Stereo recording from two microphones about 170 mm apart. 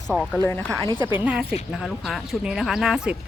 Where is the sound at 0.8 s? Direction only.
25° left (ahead or behind).